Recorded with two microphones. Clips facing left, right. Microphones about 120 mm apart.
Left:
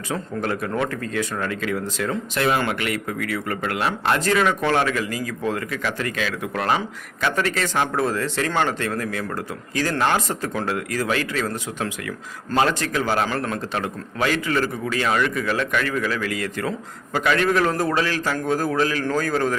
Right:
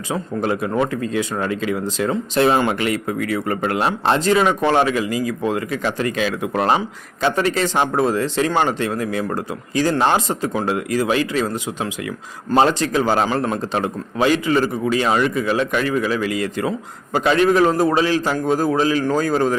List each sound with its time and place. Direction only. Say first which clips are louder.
0.1 s speech: right 4 dB; 20° right (ahead or behind)